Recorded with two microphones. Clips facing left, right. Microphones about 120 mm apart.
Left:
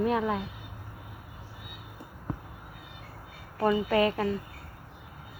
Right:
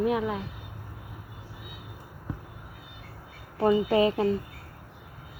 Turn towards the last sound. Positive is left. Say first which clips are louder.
# right 3 dB
turn(degrees=-25)  # may be behind; listen again after turning